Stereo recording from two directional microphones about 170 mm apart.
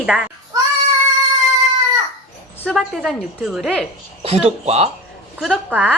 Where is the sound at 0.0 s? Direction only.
5° right (ahead or behind).